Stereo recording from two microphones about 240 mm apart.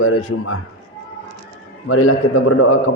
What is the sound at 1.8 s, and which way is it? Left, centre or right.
Speech, left.